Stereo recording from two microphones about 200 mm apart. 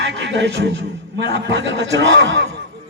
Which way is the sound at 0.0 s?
60° right (ahead or behind).